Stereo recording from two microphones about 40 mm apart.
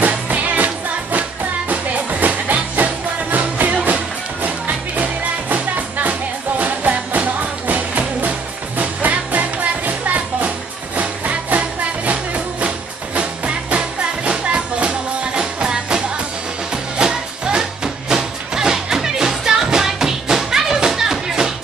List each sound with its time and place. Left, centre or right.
0.3 s music: right; by 21.5 s centre